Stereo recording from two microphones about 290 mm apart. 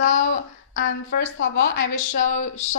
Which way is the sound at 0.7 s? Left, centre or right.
Left.